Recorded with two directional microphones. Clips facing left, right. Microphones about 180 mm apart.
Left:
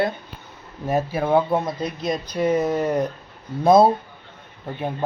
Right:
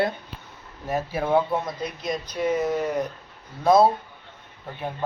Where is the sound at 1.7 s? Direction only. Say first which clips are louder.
Left 4 dB; 30° left (ahead or behind).